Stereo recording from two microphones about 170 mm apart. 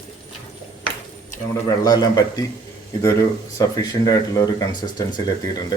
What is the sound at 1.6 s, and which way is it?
Speech, 25° left (ahead or behind).